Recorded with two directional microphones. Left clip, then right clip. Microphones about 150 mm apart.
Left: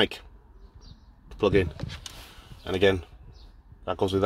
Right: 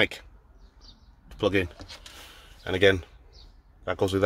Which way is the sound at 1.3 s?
25° right (ahead or behind).